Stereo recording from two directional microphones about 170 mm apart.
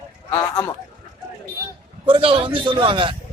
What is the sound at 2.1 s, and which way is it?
Speech, 35° right (ahead or behind).